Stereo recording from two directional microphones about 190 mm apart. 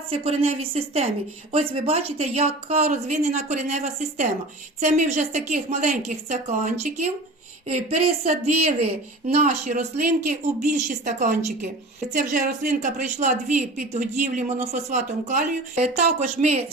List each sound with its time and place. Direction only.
0.1 s a woman's voice: 30° right (ahead or behind)